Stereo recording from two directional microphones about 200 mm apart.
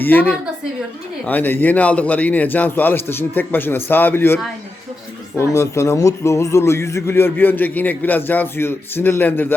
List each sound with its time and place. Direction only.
0.0 s a man's voice: 10° left (ahead or behind)
5.5 s a man's voice: 15° left (ahead or behind)